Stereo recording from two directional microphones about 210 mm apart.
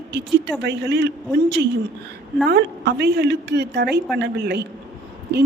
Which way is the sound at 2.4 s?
55° right (ahead or behind).